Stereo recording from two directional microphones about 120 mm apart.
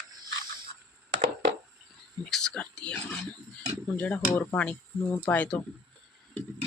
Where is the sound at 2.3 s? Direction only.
5° left (ahead or behind).